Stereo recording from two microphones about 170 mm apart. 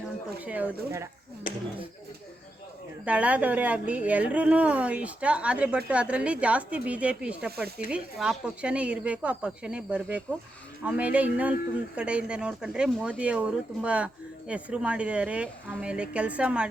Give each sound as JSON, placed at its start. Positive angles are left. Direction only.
{"t": 0.4, "sound": "speech", "side_deg": -10}
{"t": 1.5, "sound": "speech", "side_deg": 60}
{"t": 3.0, "sound": "speech", "side_deg": -10}